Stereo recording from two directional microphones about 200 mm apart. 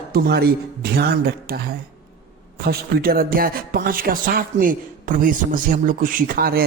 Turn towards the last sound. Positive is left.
turn(degrees=-50)  # may be behind; listen again after turning